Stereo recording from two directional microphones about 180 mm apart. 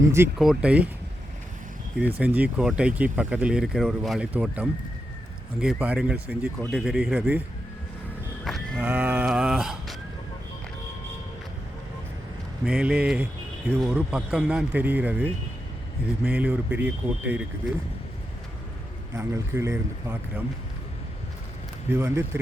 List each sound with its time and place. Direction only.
0.0 s speech: 15° right (ahead or behind)
0.3 s speech: 5° right (ahead or behind)
2.2 s speech: 5° right (ahead or behind)
8.4 s a sound: centre (ahead or behind)
8.8 s speech: 10° right (ahead or behind)
12.6 s speech: 5° right (ahead or behind)
19.1 s speech: 15° right (ahead or behind)
21.8 s speech: 15° right (ahead or behind)